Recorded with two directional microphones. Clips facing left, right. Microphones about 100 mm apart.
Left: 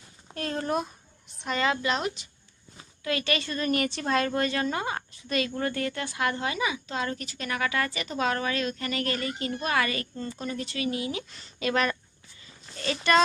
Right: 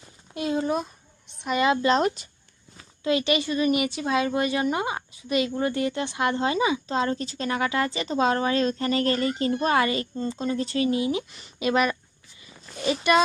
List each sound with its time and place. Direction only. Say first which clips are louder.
0.3 s a woman's voice: right 4 dB; 10° right (ahead or behind)
1.5 s a woman's voice: right 5 dB; 20° right (ahead or behind)
1.9 s speech: right 7 dB; 40° right (ahead or behind)
3.0 s a woman's voice: right 6 dB; 20° right (ahead or behind)